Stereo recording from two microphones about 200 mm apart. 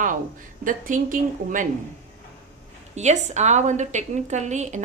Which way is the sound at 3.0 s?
35° right (ahead or behind).